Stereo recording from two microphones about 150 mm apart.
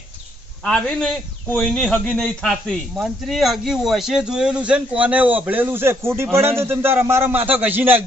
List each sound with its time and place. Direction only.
0.6 s a man's voice: 5° left (ahead or behind); by 8.0 s 15° right (ahead or behind)